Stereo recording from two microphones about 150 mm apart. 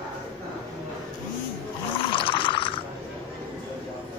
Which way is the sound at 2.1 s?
35° left (ahead or behind).